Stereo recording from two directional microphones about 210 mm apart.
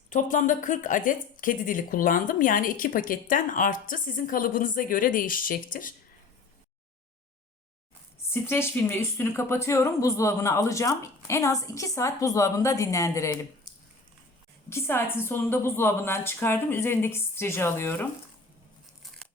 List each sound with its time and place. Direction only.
0.1 s speech: 40° left (ahead or behind)
8.3 s speech: 10° left (ahead or behind)
14.7 s speech: 10° left (ahead or behind)